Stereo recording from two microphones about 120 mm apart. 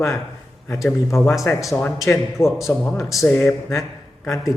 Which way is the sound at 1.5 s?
20° left (ahead or behind).